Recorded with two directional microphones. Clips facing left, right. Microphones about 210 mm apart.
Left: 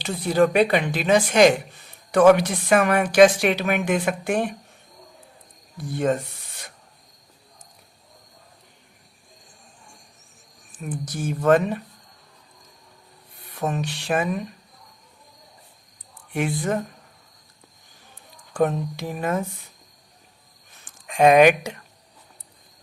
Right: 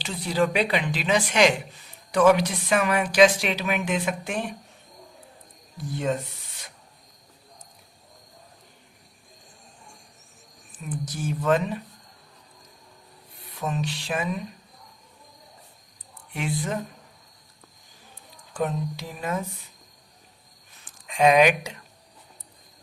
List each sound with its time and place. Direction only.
0.0 s a woman's voice: 50° left (ahead or behind)
5.9 s a woman's voice: 50° left (ahead or behind)
10.8 s a woman's voice: 50° left (ahead or behind)
13.6 s a woman's voice: 50° left (ahead or behind)
16.3 s a woman's voice: 55° left (ahead or behind)
18.5 s a woman's voice: 55° left (ahead or behind)
21.1 s a woman's voice: 50° left (ahead or behind)